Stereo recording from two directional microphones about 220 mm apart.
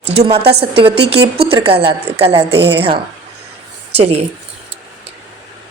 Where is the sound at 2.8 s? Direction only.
25° right (ahead or behind).